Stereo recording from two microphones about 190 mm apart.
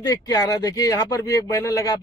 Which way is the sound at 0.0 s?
20° left (ahead or behind).